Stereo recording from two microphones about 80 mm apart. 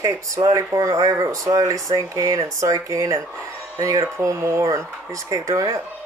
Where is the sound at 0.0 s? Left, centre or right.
Right.